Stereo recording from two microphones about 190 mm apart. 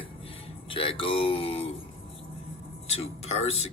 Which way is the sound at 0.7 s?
30° left (ahead or behind).